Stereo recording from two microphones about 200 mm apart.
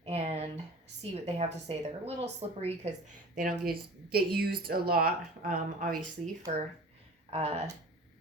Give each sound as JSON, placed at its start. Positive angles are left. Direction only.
{"t": 0.0, "sound": "a sound", "side_deg": -30}
{"t": 1.1, "sound": "speech", "side_deg": -30}
{"t": 3.3, "sound": "speech", "side_deg": -45}
{"t": 7.3, "sound": "speech", "side_deg": -30}